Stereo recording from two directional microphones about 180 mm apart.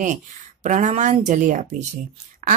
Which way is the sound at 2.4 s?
45° right (ahead or behind).